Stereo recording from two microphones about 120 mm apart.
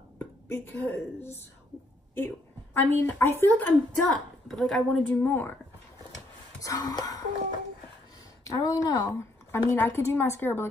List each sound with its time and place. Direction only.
0.2 s a woman's voice: 15° left (ahead or behind)
4.5 s speech: centre (ahead or behind)
5.0 s a woman's voice: 15° left (ahead or behind)
6.6 s a sound: 30° left (ahead or behind)
8.5 s a woman's voice: 30° left (ahead or behind)